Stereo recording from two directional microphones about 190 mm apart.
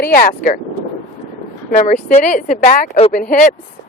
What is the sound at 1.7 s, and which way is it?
Speech, 40° left (ahead or behind).